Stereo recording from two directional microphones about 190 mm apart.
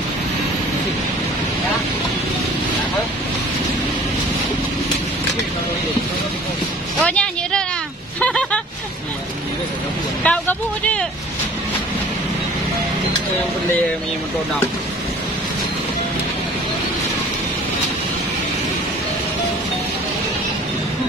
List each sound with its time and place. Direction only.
7.0 s music: 5° left (ahead or behind)
8.2 s a sound: 5° left (ahead or behind)
10.2 s vehicle: 5° left (ahead or behind)